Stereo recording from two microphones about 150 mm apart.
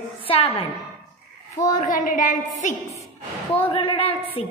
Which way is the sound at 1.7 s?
60° left (ahead or behind).